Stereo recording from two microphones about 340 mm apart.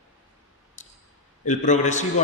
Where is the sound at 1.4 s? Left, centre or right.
Left.